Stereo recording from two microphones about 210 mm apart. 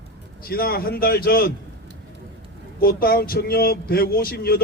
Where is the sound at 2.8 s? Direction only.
45° left (ahead or behind).